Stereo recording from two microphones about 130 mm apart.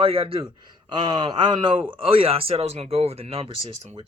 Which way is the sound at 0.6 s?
35° right (ahead or behind).